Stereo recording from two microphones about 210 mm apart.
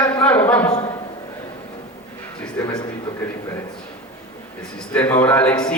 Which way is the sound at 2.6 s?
10° left (ahead or behind).